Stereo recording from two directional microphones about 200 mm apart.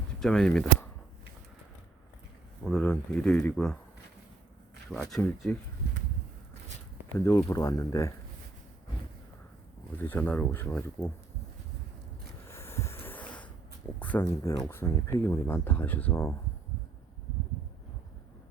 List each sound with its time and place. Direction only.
0.2 s speech: 5° left (ahead or behind)
2.6 s speech: 5° left (ahead or behind)
5.0 s speech: centre (ahead or behind)
7.1 s speech: 15° left (ahead or behind)
10.0 s speech: 10° left (ahead or behind)
12.5 s snort: 15° left (ahead or behind)
14.0 s speech: 10° left (ahead or behind)